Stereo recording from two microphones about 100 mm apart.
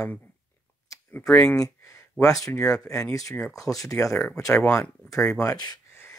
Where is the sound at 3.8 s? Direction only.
30° left (ahead or behind).